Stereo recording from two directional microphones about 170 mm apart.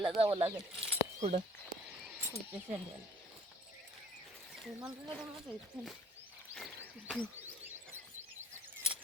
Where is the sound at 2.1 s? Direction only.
15° right (ahead or behind).